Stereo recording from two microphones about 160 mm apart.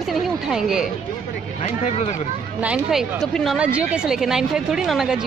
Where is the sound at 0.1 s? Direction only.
5° right (ahead or behind).